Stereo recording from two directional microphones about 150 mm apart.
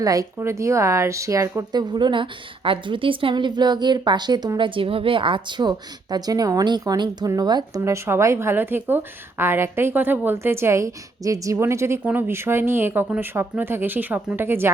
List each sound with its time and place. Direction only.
0.0 s a woman's voice: 25° right (ahead or behind)